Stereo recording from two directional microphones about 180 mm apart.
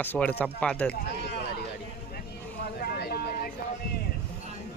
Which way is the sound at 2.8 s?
60° left (ahead or behind).